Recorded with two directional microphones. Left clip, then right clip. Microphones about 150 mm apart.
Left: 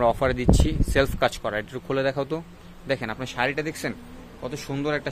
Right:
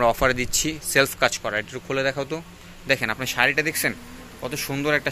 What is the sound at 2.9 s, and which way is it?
A man's voice, 5° left (ahead or behind).